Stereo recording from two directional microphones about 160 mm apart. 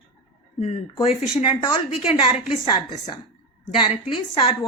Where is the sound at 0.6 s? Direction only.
35° left (ahead or behind).